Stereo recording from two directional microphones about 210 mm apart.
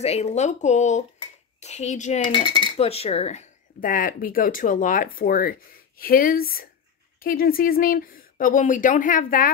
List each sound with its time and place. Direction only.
0.0 s speech: 30° left (ahead or behind)
2.2 s speech: 25° left (ahead or behind); by 9.5 s 40° left (ahead or behind)